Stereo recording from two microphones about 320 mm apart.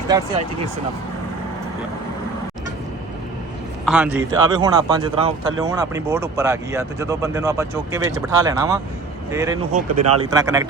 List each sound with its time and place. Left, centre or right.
3.8 s speech: centre
9.9 s speech: right
10.2 s speech: centre